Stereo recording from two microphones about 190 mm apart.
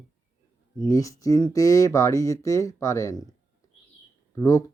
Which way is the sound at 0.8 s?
15° left (ahead or behind).